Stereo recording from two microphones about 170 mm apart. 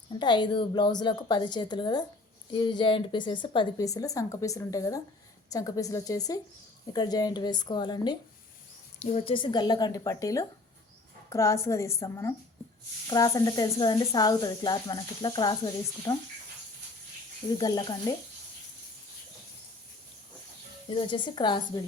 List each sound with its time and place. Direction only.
0.1 s speech: 25° left (ahead or behind)
9.0 s a woman's voice: 40° left (ahead or behind); by 16.1 s 25° left (ahead or behind)
17.6 s speech: 25° left (ahead or behind)
20.9 s speech: 30° left (ahead or behind)